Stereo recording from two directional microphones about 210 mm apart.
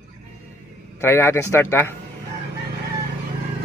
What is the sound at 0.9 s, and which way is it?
Speech, 10° left (ahead or behind).